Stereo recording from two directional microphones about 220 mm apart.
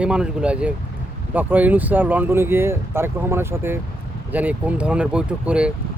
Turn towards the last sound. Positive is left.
turn(degrees=-5)  # may be behind; listen again after turning